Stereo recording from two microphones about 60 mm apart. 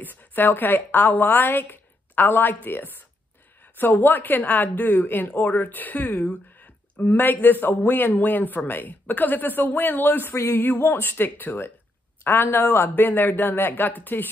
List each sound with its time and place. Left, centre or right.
0.0 s a woman's voice: left